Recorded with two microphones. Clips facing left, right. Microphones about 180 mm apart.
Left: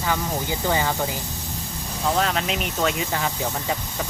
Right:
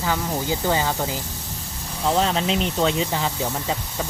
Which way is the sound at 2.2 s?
25° right (ahead or behind).